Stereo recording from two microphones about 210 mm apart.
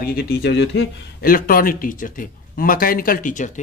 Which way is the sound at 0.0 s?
50° left (ahead or behind).